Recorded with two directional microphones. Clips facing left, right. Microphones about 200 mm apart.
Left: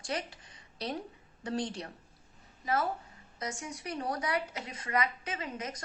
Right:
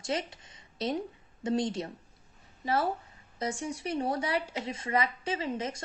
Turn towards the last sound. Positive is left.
turn(degrees=-30)  # may be behind; listen again after turning